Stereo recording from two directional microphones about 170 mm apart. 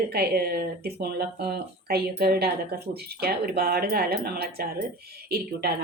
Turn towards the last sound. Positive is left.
turn(degrees=-65)  # may be behind; listen again after turning